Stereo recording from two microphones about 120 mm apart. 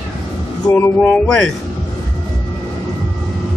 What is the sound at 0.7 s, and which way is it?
Speech, 15° left (ahead or behind).